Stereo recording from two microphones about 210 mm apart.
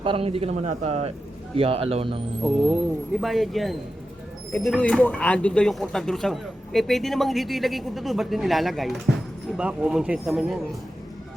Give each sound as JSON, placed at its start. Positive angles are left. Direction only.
{"t": 0.0, "sound": "a man's voice", "side_deg": -25}
{"t": 3.2, "sound": "speech", "side_deg": 0}